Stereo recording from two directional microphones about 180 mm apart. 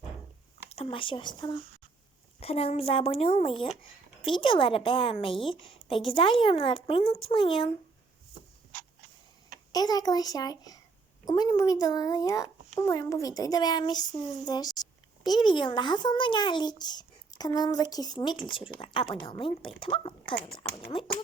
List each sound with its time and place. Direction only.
0.7 s a woman's voice: 30° left (ahead or behind)
9.7 s a child's voice: 20° left (ahead or behind)